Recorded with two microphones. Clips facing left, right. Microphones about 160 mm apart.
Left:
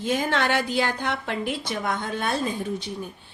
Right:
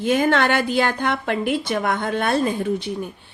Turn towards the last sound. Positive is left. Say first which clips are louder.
# right 6 dB
turn(degrees=-60)  # may be behind; listen again after turning